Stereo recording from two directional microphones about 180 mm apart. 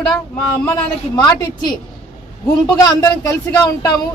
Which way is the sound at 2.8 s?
20° left (ahead or behind).